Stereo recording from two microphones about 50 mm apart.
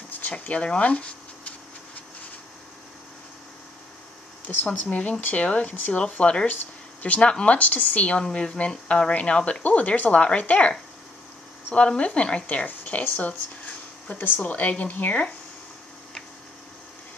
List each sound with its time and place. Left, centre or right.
0.2 s speech: left
4.7 s speech: left
6.4 s speech: left
7.2 s speech: centre
7.5 s speech: left
11.7 s speech: left
13.0 s speech: left
14.4 s speech: left